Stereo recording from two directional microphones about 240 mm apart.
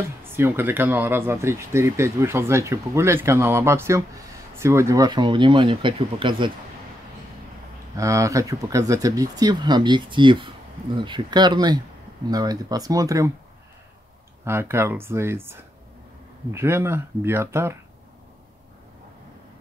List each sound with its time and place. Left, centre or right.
0.2 s speech: centre
7.9 s speech: centre
14.4 s speech: centre